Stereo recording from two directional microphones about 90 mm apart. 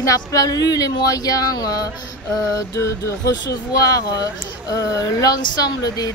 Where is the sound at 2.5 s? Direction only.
40° left (ahead or behind).